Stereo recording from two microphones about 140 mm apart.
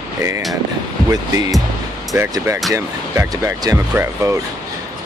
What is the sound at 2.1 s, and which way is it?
Speech, 20° right (ahead or behind).